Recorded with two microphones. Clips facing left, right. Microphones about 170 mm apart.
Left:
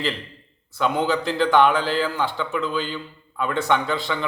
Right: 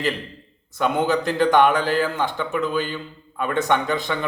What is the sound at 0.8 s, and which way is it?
A man's voice, 50° right (ahead or behind).